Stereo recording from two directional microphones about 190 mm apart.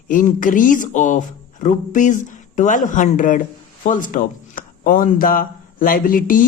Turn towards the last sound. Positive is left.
turn(degrees=45)  # may be behind; listen again after turning